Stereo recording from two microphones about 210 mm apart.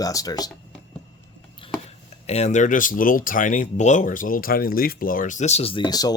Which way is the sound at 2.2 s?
30° left (ahead or behind).